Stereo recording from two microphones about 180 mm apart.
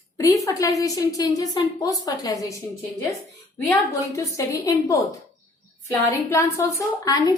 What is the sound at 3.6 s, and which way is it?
A woman's voice, 15° left (ahead or behind).